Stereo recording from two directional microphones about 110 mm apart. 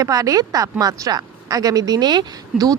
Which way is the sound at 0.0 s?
35° right (ahead or behind).